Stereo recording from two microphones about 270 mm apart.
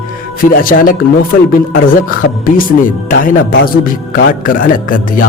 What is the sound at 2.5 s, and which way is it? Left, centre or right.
Speech, left.